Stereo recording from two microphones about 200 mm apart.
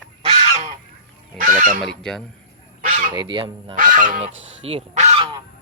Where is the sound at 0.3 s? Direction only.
30° right (ahead or behind).